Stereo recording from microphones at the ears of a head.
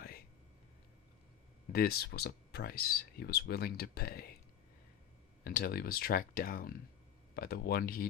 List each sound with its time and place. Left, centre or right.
1.6 s speech: left
5.4 s speech: left